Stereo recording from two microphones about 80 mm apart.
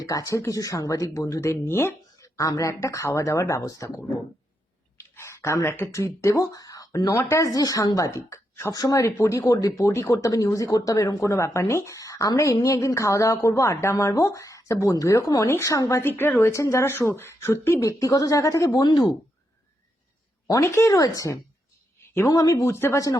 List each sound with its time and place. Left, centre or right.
0.0 s speech: left
4.9 s a sound: left
5.9 s speech: left
7.0 s speech: left
8.7 s speech: left
9.1 s speech: left
9.6 s speech: left
9.8 s speech: left
16.0 s speech: left
17.8 s speech: left
20.5 s speech: left
22.6 s speech: left